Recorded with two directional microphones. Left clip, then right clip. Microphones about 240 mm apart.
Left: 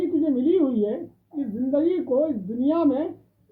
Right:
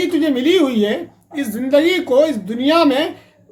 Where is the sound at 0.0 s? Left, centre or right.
Right.